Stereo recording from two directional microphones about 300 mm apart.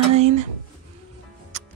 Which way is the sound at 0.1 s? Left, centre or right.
Right.